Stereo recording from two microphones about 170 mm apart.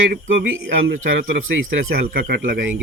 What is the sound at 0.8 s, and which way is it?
Speech, 90° right.